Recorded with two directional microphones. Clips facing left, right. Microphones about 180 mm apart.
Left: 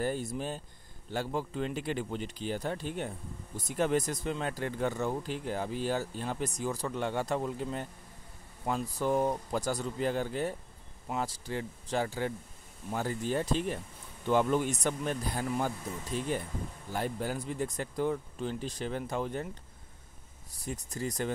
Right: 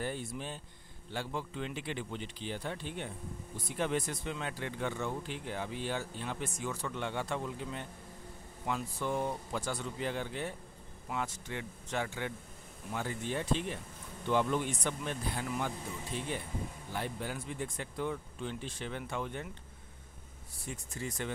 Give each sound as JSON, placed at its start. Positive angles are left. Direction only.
{"t": 0.0, "sound": "speech", "side_deg": 40}
{"t": 20.5, "sound": "speech", "side_deg": 40}